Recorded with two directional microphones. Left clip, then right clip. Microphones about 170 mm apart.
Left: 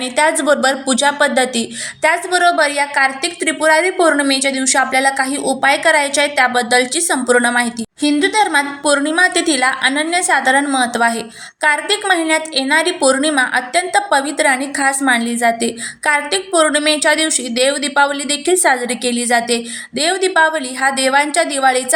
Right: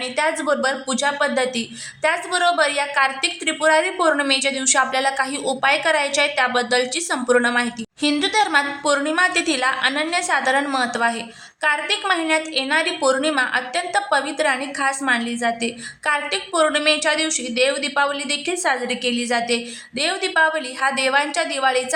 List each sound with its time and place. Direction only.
0.0 s a woman's voice: 20° left (ahead or behind)